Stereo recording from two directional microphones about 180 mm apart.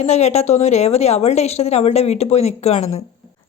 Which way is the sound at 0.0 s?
35° left (ahead or behind).